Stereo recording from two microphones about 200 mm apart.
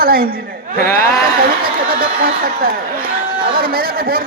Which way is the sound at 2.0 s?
50° right (ahead or behind).